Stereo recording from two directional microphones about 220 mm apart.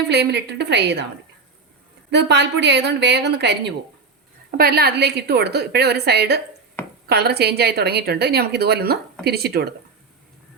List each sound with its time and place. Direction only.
0.1 s a woman's voice: 50° right (ahead or behind)
2.0 s a woman's voice: 50° right (ahead or behind)